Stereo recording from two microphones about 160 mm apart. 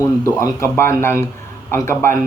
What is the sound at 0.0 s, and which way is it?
Speech, 20° left (ahead or behind).